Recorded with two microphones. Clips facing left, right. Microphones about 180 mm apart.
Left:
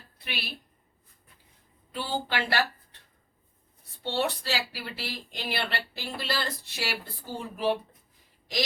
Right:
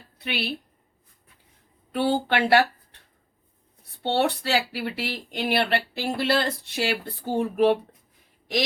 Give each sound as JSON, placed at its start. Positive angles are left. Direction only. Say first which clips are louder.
{"t": 0.2, "sound": "a woman's voice", "louder": "right 9 dB", "side_deg": -70}
{"t": 1.9, "sound": "speech", "louder": "right 9 dB", "side_deg": -60}
{"t": 4.0, "sound": "speech", "louder": "right 6 dB", "side_deg": -60}